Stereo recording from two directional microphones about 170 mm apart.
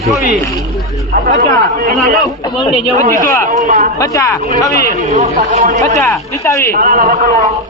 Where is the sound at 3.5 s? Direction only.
50° right (ahead or behind).